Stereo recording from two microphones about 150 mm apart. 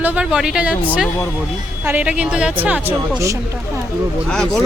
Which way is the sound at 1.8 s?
10° right (ahead or behind).